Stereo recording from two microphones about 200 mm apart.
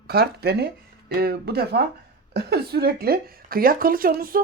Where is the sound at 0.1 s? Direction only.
50° right (ahead or behind).